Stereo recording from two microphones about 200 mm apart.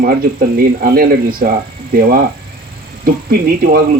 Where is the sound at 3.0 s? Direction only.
50° right (ahead or behind).